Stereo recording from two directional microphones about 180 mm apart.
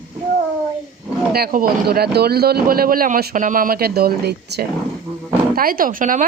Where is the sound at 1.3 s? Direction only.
60° right (ahead or behind).